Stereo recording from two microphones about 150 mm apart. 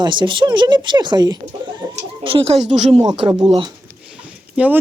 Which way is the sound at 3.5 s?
30° right (ahead or behind).